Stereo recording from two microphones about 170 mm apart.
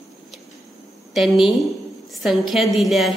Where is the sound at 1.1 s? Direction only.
Centre (ahead or behind).